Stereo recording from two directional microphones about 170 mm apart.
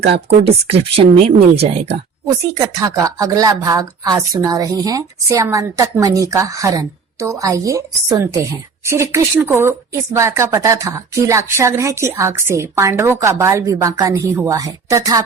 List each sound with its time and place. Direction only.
0.0 s speech: 90° right
0.4 s speech: 35° right (ahead or behind)
2.6 s speech: 20° right (ahead or behind)